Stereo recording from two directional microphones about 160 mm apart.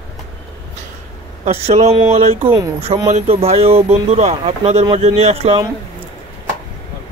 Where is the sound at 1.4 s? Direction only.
45° right (ahead or behind).